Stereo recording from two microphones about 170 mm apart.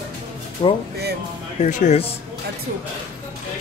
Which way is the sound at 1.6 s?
45° left (ahead or behind).